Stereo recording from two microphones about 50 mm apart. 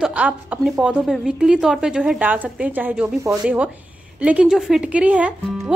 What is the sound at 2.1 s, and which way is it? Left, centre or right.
A woman's voice, right.